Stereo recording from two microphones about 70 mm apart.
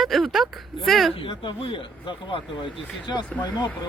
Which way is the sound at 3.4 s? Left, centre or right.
Left.